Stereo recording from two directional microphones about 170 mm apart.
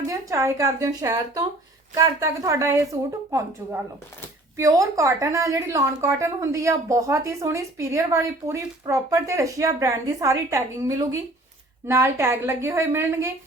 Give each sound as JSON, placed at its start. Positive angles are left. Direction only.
{"t": 0.1, "sound": "a woman's voice", "side_deg": -20}